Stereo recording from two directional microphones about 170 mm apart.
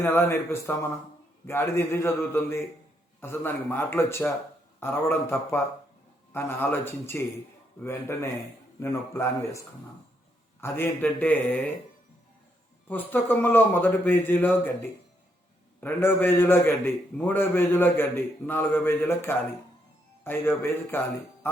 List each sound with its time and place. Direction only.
0.0 s a man's voice: 10° left (ahead or behind)
12.9 s a man's voice: 10° left (ahead or behind)